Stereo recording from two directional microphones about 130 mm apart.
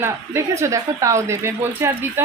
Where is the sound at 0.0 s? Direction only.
20° right (ahead or behind).